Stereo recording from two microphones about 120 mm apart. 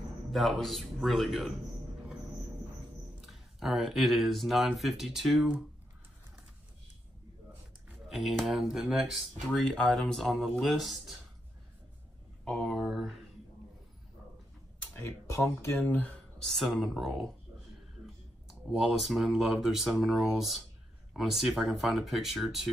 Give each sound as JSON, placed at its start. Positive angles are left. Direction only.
{"t": 0.3, "sound": "speech", "side_deg": 0}
{"t": 3.2, "sound": "speech", "side_deg": 0}
{"t": 8.1, "sound": "speech", "side_deg": 0}
{"t": 12.4, "sound": "speech", "side_deg": 0}
{"t": 15.0, "sound": "speech", "side_deg": 20}
{"t": 16.4, "sound": "speech", "side_deg": 0}